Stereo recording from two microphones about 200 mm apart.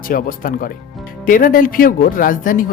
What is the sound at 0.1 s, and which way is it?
Speech, 45° left (ahead or behind).